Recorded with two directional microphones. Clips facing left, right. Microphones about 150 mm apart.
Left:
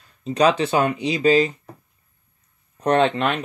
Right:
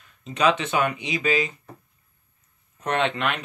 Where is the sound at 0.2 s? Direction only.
35° left (ahead or behind).